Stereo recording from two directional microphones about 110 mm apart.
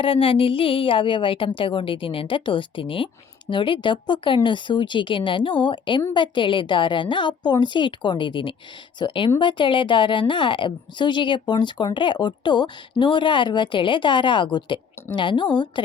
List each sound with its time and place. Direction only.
0.0 s speech: 55° left (ahead or behind)